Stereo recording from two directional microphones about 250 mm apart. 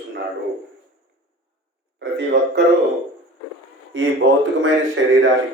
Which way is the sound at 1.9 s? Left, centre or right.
Right.